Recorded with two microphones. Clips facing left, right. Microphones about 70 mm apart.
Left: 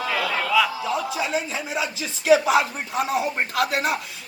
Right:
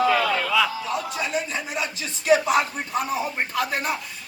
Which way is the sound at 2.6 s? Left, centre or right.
Left.